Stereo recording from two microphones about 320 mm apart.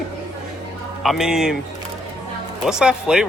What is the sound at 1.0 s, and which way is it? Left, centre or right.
Speech, centre.